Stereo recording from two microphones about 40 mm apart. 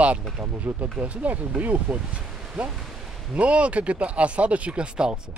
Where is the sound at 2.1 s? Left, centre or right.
Right.